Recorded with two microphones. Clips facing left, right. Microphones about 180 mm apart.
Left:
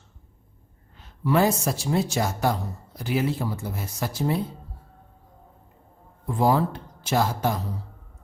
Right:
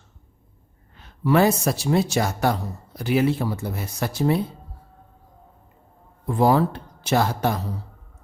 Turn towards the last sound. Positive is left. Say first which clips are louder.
# right 2 dB
turn(degrees=-65)  # may be behind; listen again after turning